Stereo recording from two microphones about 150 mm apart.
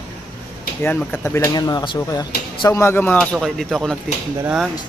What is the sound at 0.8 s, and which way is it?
Speech, 10° left (ahead or behind).